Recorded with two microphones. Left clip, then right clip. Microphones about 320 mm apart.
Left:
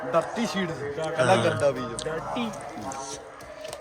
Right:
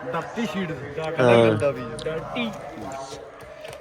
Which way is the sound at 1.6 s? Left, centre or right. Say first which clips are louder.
Even; centre.